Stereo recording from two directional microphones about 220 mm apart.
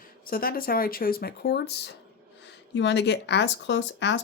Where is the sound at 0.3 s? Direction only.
40° left (ahead or behind).